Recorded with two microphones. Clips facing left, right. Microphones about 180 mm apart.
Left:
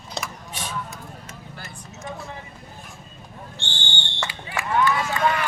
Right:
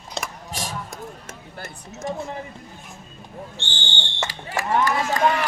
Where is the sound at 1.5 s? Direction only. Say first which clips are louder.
Right 3 dB; 50° right (ahead or behind).